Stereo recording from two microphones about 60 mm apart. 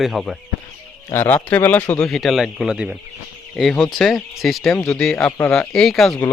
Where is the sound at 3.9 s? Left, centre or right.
Centre.